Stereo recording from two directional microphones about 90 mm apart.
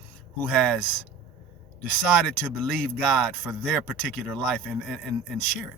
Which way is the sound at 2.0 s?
5° left (ahead or behind).